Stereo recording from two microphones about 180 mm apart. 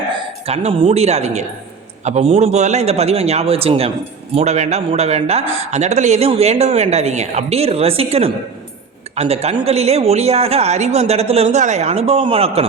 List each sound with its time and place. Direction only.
0.1 s speech: 35° right (ahead or behind)